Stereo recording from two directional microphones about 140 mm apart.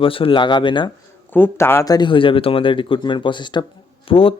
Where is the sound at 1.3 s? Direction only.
15° left (ahead or behind).